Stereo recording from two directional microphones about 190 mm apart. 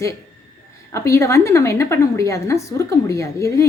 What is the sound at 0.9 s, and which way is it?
A woman's voice, 15° left (ahead or behind).